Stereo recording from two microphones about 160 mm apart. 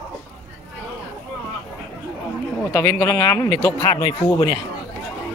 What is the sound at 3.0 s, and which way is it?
A man's voice, 20° left (ahead or behind).